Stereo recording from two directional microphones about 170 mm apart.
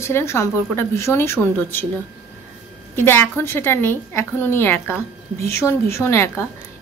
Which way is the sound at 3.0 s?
15° left (ahead or behind).